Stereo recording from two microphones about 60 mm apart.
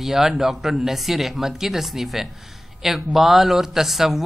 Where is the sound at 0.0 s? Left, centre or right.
Centre.